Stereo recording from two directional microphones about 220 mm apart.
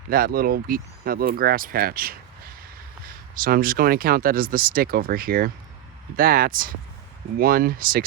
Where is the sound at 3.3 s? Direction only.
40° right (ahead or behind).